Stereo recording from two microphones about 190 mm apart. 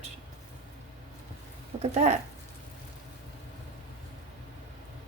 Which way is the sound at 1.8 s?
35° right (ahead or behind).